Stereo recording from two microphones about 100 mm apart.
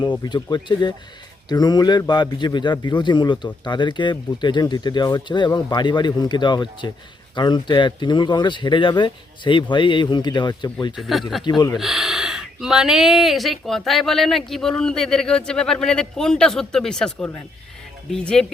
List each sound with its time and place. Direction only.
0.2 s a man's voice: 45° left (ahead or behind)
5.5 s a man's voice: 30° left (ahead or behind)
5.7 s a man's voice: 50° left (ahead or behind)
10.9 s speech: centre (ahead or behind)